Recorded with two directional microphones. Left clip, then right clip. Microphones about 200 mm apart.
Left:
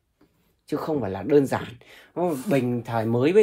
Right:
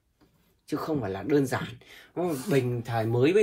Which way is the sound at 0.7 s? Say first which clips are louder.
Left 4 dB; 45° left (ahead or behind).